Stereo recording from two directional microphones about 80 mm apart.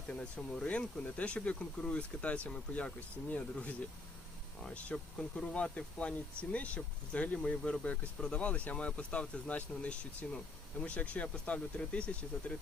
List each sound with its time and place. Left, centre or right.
0.1 s speech: centre